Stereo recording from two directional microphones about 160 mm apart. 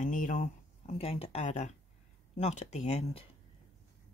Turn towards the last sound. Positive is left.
turn(degrees=40)  # may be behind; listen again after turning